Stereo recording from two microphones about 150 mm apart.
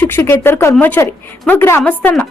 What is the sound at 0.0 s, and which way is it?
Speech, 15° left (ahead or behind).